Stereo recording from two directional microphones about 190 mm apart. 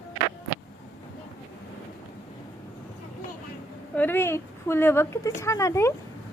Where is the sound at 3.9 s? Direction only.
10° left (ahead or behind).